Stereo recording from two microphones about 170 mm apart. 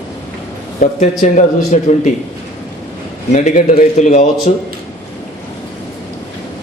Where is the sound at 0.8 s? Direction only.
50° left (ahead or behind).